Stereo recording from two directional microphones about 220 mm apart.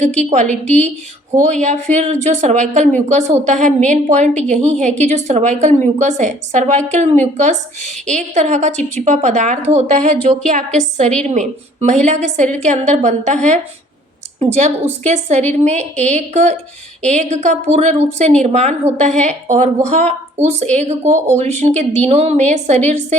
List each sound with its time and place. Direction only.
0.0 s a woman's voice: 30° right (ahead or behind)